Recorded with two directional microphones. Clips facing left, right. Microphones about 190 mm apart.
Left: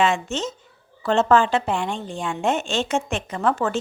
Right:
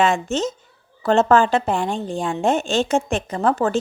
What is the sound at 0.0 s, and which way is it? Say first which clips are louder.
A woman's voice: right 3 dB; 40° right (ahead or behind).